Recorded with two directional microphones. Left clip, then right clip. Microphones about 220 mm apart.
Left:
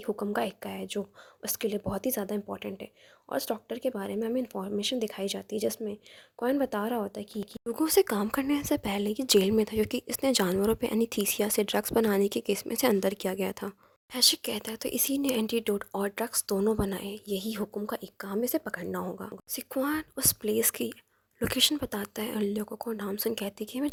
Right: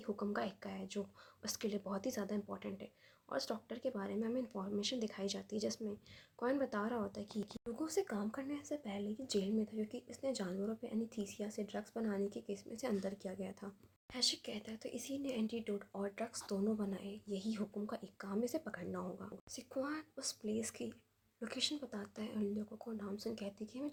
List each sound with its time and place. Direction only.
0.0 s speech: 35° left (ahead or behind)
7.7 s speech: 45° left (ahead or behind)